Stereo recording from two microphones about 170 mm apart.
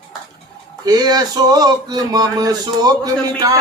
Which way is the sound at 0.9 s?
20° right (ahead or behind).